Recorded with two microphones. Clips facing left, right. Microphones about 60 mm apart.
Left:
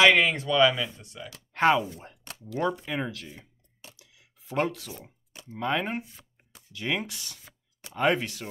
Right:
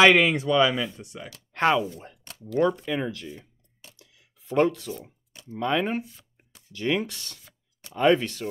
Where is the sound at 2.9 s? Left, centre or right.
Centre.